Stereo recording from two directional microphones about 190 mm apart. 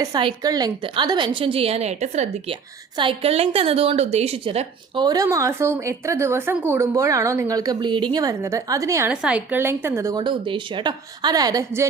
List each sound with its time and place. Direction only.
0.0 s a woman's voice: 25° right (ahead or behind)